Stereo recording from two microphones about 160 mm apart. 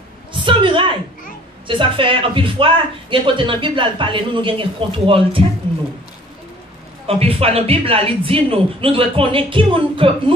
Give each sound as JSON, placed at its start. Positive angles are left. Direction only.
{"t": 0.3, "sound": "a sound", "side_deg": -30}
{"t": 1.7, "sound": "speech", "side_deg": -30}
{"t": 7.1, "sound": "speech", "side_deg": -35}